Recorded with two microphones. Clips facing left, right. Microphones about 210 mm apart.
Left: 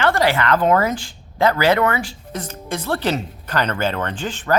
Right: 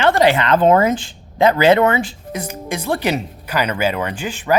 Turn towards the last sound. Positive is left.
turn(degrees=-10)  # may be behind; listen again after turning